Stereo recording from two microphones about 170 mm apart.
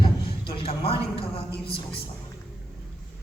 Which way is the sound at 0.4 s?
35° left (ahead or behind).